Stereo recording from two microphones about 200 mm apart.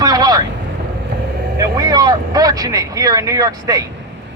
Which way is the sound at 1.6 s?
20° right (ahead or behind).